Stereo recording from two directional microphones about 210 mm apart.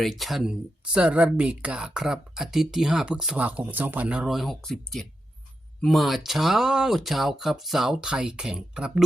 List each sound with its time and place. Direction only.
0.0 s speech: centre (ahead or behind)